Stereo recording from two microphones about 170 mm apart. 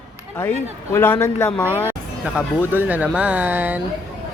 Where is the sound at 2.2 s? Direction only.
5° right (ahead or behind).